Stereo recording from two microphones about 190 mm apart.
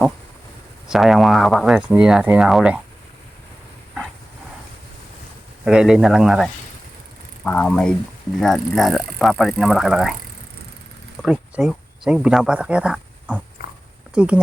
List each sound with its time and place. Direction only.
0.9 s speech: centre (ahead or behind)
5.6 s speech: 5° right (ahead or behind)
11.2 s speech: 5° right (ahead or behind)
13.6 s a sound: 50° left (ahead or behind)
14.1 s speech: 5° right (ahead or behind)